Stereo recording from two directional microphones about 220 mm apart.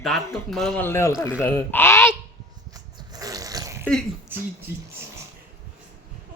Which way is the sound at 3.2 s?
15° right (ahead or behind).